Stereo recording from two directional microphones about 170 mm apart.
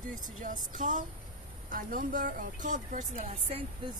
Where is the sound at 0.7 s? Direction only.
50° right (ahead or behind).